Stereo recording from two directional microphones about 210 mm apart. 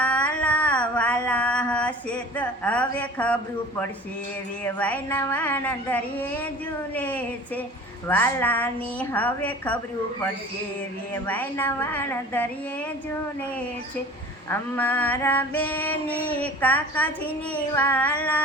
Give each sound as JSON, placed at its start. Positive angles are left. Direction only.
{"t": 0.0, "sound": "a sound", "side_deg": 5}
{"t": 4.6, "sound": "female singing", "side_deg": 10}
{"t": 11.1, "sound": "female singing", "side_deg": 10}
{"t": 14.5, "sound": "female singing", "side_deg": 10}